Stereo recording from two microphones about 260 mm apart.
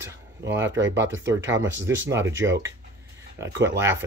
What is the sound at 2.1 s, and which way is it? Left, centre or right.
Speech, centre.